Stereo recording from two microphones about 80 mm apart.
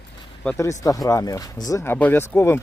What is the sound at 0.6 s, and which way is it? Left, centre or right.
Speech, left.